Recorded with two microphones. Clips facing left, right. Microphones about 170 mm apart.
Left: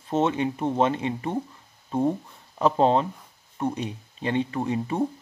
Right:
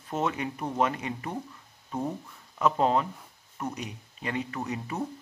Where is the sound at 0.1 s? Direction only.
25° left (ahead or behind).